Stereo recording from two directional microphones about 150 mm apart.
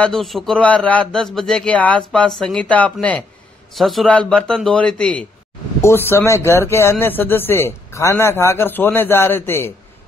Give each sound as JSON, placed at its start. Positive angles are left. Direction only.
{"t": 0.0, "sound": "speech", "side_deg": 0}